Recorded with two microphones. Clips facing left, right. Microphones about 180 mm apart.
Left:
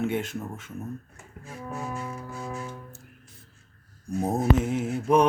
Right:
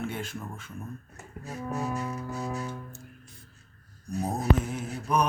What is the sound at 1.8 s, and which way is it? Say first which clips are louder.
Speech: right 2 dB; 20° right (ahead or behind).